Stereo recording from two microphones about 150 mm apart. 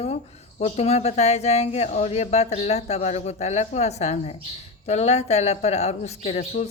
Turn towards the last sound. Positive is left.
turn(degrees=45)  # may be behind; listen again after turning